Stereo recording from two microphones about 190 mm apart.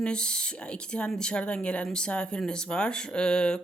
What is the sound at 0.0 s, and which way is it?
Speech, 5° left (ahead or behind).